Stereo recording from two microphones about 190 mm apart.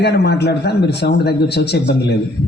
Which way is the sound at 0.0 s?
60° left (ahead or behind).